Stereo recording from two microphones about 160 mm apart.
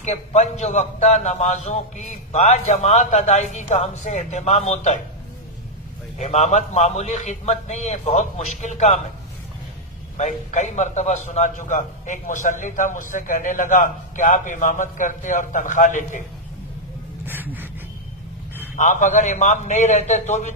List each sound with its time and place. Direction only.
0.0 s a man's voice: 45° left (ahead or behind)
6.1 s a man's voice: 45° left (ahead or behind)
10.1 s a man's voice: 50° left (ahead or behind)
17.3 s a sound: 10° right (ahead or behind)
18.8 s a man's voice: 50° left (ahead or behind)